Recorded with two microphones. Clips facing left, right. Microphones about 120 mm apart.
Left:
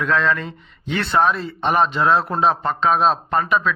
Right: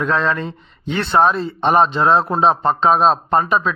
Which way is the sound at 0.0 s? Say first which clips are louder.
Right 1 dB; 30° right (ahead or behind).